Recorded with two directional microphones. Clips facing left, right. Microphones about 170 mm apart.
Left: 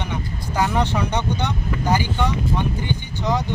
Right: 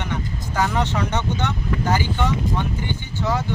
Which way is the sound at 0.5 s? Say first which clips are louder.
Left 1 dB; 15° left (ahead or behind).